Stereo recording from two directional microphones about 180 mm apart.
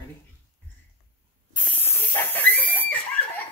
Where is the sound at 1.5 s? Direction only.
10° left (ahead or behind).